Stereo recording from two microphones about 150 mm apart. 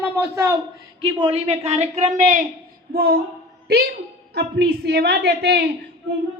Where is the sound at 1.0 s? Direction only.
30° right (ahead or behind).